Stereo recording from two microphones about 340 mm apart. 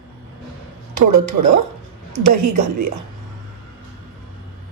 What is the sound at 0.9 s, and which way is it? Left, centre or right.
Speech, right.